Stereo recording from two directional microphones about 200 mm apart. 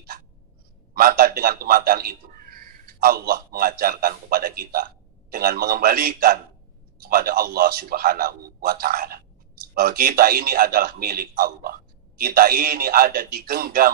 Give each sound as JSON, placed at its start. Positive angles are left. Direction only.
{"t": 0.9, "sound": "a man's voice", "side_deg": -45}